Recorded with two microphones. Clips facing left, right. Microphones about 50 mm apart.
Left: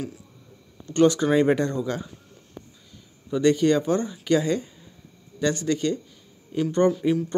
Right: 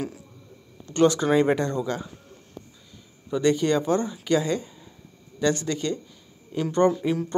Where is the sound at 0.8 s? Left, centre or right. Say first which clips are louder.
Left 1 dB; centre.